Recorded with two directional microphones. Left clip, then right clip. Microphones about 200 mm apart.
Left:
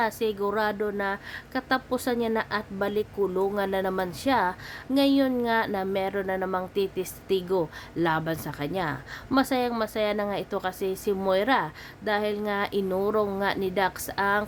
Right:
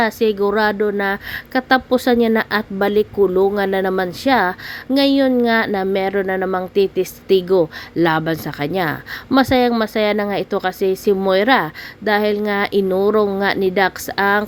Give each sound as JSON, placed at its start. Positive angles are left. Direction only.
{"t": 0.0, "sound": "a woman's voice", "side_deg": -20}